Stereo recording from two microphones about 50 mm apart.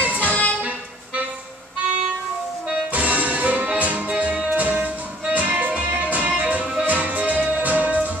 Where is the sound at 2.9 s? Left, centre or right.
Right.